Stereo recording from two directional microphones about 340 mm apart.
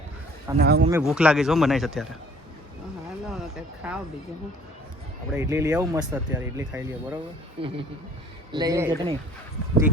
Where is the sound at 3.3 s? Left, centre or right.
Centre.